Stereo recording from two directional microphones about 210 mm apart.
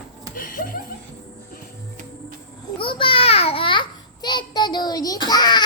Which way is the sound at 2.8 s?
25° left (ahead or behind).